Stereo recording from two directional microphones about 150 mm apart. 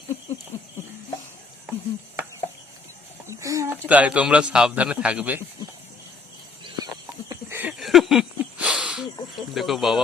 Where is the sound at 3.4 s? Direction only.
20° right (ahead or behind).